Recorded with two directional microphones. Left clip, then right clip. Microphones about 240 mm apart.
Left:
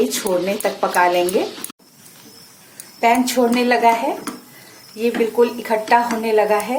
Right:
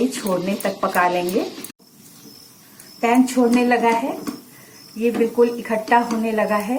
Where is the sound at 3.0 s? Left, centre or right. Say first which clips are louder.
Left 2 dB; left.